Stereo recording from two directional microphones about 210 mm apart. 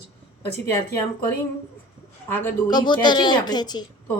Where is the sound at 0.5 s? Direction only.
50° left (ahead or behind).